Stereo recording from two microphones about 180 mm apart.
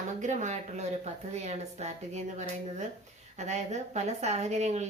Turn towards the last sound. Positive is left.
turn(degrees=-40)  # may be behind; listen again after turning